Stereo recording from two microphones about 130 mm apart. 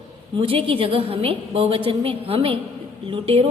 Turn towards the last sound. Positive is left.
turn(degrees=-45)  # may be behind; listen again after turning